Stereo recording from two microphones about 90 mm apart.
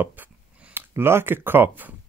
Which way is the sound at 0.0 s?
20° right (ahead or behind).